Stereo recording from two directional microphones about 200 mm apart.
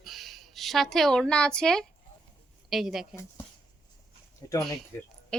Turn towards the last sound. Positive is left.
turn(degrees=5)  # may be behind; listen again after turning